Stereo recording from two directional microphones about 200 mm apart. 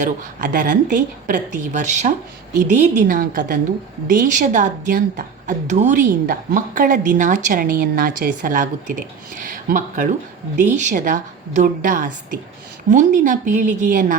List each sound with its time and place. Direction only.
0.0 s a woman's voice: 40° right (ahead or behind)